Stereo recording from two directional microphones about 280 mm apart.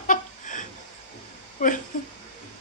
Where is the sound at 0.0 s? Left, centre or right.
Left.